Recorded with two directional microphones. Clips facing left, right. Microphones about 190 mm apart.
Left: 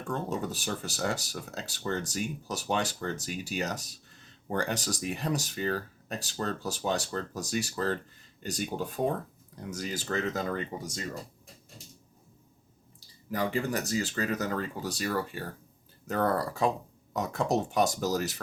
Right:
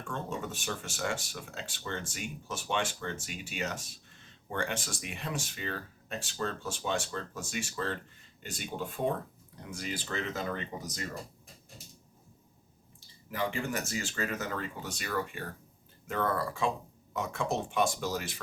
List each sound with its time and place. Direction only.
0.1 s speech: 35° left (ahead or behind)
13.3 s speech: 35° left (ahead or behind)